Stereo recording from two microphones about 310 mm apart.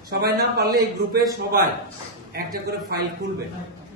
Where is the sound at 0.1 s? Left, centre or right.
Right.